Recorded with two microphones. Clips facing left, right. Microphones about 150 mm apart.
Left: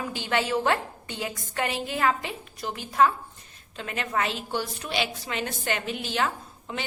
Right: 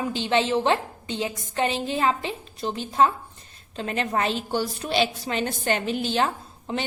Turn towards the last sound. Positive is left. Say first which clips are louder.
# right 5 dB
turn(degrees=-30)  # may be behind; listen again after turning